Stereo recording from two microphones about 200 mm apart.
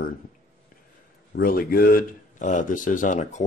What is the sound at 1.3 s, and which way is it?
Speech, 50° left (ahead or behind).